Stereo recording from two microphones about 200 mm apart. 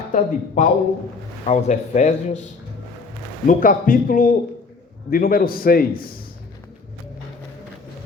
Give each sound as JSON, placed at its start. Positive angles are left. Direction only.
{"t": 0.1, "sound": "a man's voice", "side_deg": 40}